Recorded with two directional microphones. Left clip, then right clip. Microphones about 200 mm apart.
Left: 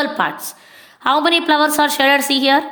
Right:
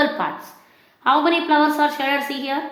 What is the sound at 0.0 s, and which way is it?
Speech, 40° left (ahead or behind).